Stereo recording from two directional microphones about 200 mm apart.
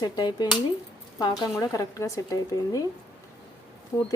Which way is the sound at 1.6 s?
15° left (ahead or behind).